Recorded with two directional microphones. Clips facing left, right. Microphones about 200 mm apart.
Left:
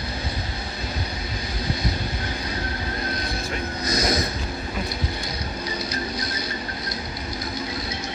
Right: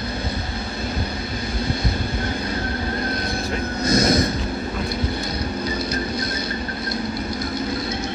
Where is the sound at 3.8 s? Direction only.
25° right (ahead or behind).